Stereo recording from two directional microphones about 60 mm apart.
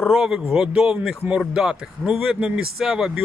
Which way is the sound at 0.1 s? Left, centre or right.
Centre.